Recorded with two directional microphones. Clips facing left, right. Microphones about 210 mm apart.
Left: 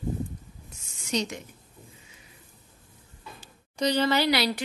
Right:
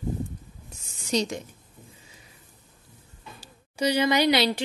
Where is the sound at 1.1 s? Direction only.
35° right (ahead or behind).